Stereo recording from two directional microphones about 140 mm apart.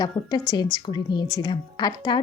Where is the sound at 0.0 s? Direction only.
30° left (ahead or behind).